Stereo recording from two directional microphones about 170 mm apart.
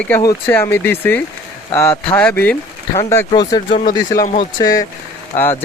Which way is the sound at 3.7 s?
45° left (ahead or behind).